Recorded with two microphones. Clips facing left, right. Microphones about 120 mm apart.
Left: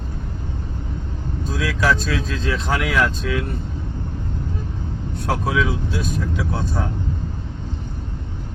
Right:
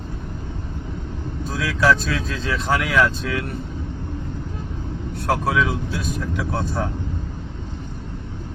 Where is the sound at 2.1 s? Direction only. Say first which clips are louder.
Left 1 dB; 5° left (ahead or behind).